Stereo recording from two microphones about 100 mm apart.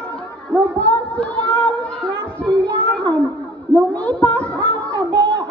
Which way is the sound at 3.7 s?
50° right (ahead or behind).